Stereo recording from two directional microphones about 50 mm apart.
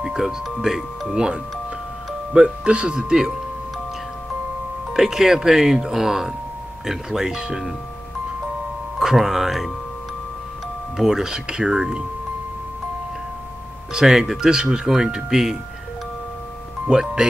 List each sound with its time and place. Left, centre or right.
0.0 s speech: centre
4.9 s speech: centre
8.9 s speech: centre
11.0 s speech: centre
13.9 s speech: centre
16.8 s speech: centre